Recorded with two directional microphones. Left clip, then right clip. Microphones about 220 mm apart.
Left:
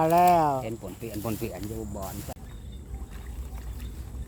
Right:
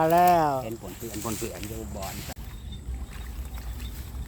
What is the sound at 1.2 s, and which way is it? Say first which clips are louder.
Speech: even; 45° left (ahead or behind).